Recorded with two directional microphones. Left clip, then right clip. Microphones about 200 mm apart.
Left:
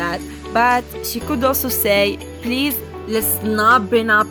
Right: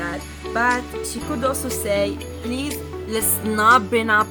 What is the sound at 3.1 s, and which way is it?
Speech, 25° left (ahead or behind).